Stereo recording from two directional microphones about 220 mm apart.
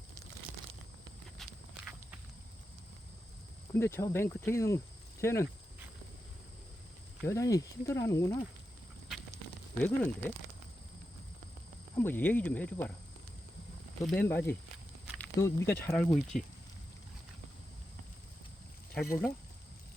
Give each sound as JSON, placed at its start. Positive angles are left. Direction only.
{"t": 1.4, "sound": "walk", "side_deg": -5}
{"t": 3.8, "sound": "speech", "side_deg": 10}
{"t": 7.3, "sound": "speech", "side_deg": 15}
{"t": 9.8, "sound": "speech", "side_deg": 5}
{"t": 11.9, "sound": "speech", "side_deg": 10}
{"t": 14.0, "sound": "speech", "side_deg": 5}
{"t": 16.3, "sound": "speech", "side_deg": 35}
{"t": 18.9, "sound": "speech", "side_deg": 10}